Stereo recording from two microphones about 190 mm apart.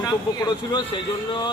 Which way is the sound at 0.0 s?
20° left (ahead or behind).